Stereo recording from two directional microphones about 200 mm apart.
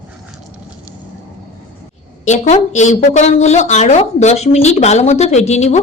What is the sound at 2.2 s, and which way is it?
Speech, 35° left (ahead or behind).